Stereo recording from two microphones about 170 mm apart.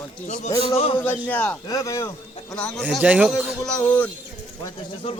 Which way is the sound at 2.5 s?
5° left (ahead or behind).